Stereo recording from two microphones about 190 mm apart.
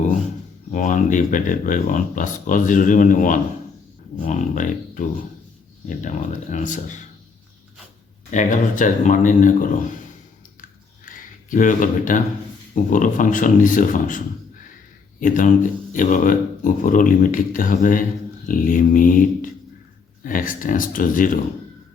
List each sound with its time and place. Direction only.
0.7 s speech: 40° left (ahead or behind)
8.3 s speech: 40° left (ahead or behind)
11.0 s a sound: 45° left (ahead or behind)
12.7 s speech: 45° left (ahead or behind)
15.2 s speech: 45° left (ahead or behind)